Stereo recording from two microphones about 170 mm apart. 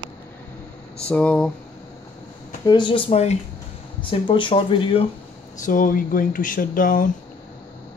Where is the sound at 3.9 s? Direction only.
30° left (ahead or behind).